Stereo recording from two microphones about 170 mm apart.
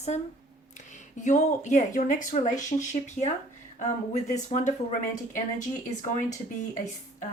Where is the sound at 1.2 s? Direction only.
45° left (ahead or behind).